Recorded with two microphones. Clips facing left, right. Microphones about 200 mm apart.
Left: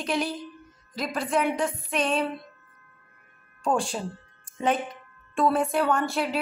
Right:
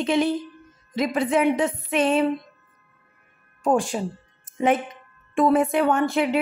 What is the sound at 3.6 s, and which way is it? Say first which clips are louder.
Music: right 5 dB; 15° right (ahead or behind).